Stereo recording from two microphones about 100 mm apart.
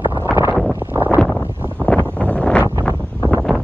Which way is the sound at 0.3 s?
20° right (ahead or behind).